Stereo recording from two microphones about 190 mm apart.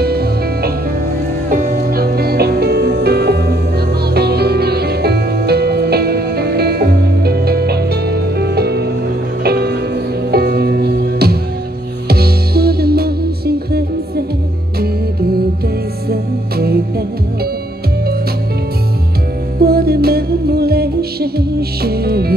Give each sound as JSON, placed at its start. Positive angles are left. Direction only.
{"t": 0.0, "sound": "music", "side_deg": -55}
{"t": 1.5, "sound": "music", "side_deg": -45}
{"t": 16.1, "sound": "music", "side_deg": -55}
{"t": 19.6, "sound": "music", "side_deg": -55}